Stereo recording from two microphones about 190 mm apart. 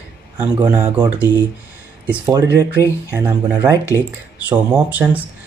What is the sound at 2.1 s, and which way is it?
Speech, 15° right (ahead or behind).